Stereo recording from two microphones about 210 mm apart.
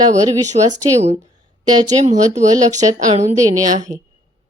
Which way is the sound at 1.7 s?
20° right (ahead or behind).